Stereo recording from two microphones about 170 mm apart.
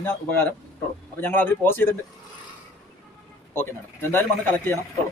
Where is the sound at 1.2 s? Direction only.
10° left (ahead or behind).